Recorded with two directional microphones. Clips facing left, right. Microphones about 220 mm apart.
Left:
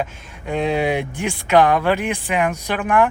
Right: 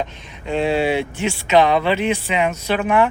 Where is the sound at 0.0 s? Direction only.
15° left (ahead or behind).